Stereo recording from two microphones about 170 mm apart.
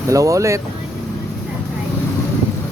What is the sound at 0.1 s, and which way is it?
Speech, 20° right (ahead or behind).